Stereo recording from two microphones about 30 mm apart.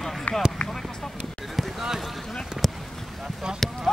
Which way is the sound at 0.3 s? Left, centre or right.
Left.